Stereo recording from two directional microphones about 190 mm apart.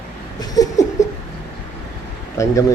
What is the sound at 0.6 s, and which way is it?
Laughter, 20° left (ahead or behind).